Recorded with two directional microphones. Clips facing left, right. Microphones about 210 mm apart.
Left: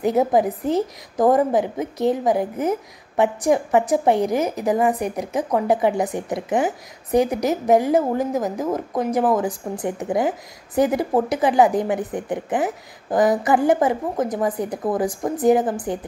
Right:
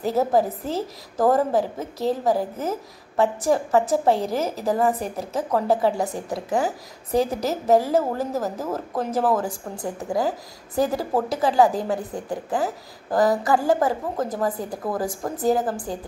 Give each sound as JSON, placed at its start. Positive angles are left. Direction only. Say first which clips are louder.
{"t": 0.0, "sound": "a woman's voice", "louder": "left 3 dB", "side_deg": 15}